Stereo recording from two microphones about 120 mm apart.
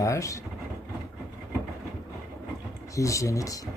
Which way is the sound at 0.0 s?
25° left (ahead or behind).